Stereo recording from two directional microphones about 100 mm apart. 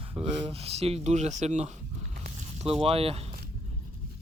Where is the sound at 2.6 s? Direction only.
85° right.